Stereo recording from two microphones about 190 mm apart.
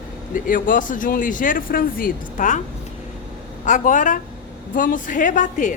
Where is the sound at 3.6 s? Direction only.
40° left (ahead or behind).